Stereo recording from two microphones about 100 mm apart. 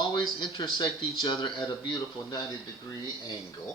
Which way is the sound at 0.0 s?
45° left (ahead or behind).